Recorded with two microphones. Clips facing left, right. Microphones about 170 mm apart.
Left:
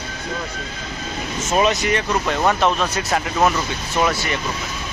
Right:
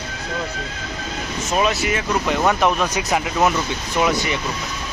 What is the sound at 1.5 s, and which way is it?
Speech, centre (ahead or behind).